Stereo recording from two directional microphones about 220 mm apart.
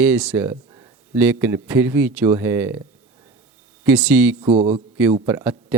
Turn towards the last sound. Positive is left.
turn(degrees=-10)  # may be behind; listen again after turning